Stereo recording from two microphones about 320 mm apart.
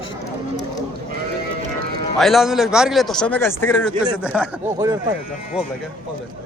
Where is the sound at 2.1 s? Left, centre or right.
Centre.